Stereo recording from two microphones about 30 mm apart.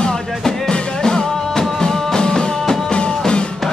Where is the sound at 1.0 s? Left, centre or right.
Left.